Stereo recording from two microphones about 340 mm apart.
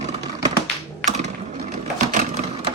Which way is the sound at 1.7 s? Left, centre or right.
Right.